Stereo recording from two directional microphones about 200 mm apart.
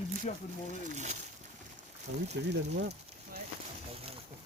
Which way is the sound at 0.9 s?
35° right (ahead or behind).